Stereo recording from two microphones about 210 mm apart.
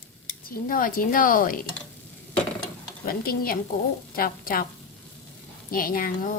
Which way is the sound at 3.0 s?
45° left (ahead or behind).